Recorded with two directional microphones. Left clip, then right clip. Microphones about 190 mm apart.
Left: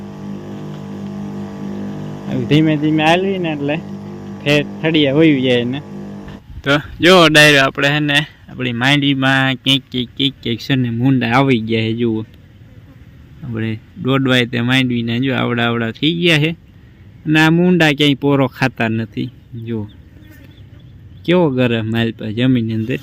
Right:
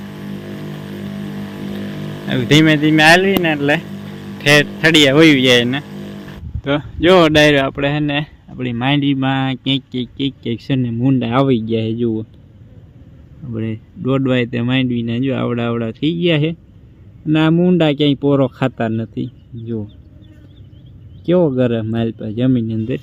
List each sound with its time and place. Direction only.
1.4 s vehicle: 15° left (ahead or behind)
2.2 s speech: centre (ahead or behind)
5.9 s a sound: 20° left (ahead or behind)
6.6 s speech: centre (ahead or behind)
13.5 s speech: 10° left (ahead or behind)
21.2 s speech: 5° left (ahead or behind)